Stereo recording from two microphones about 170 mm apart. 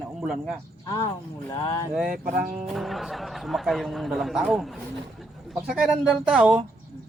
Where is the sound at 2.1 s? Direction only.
55° right (ahead or behind).